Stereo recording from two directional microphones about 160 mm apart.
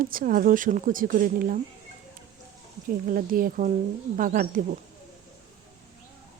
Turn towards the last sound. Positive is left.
turn(degrees=-60)  # may be behind; listen again after turning